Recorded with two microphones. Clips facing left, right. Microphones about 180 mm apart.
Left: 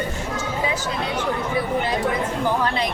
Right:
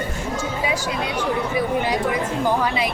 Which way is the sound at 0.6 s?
10° right (ahead or behind).